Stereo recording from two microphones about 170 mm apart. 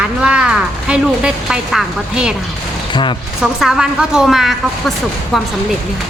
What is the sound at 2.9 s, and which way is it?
Speech, 30° left (ahead or behind).